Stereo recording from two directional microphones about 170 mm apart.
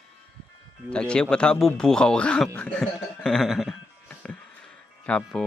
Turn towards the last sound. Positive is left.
turn(degrees=5)  # may be behind; listen again after turning